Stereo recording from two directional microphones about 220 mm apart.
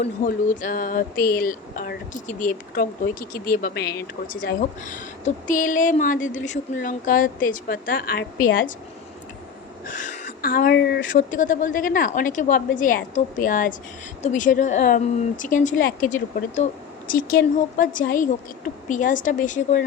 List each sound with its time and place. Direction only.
0.0 s speech: 35° left (ahead or behind)
9.8 s speech: 35° left (ahead or behind)